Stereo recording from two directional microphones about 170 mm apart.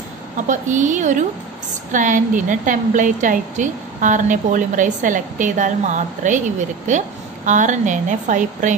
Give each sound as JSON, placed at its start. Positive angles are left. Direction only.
{"t": 0.5, "sound": "a woman's voice", "side_deg": -45}
{"t": 7.4, "sound": "a woman's voice", "side_deg": -45}